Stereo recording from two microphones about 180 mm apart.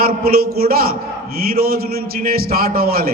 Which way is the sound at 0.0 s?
55° right (ahead or behind).